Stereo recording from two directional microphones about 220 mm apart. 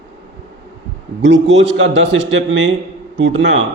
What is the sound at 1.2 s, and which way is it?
A man's voice, 55° right (ahead or behind).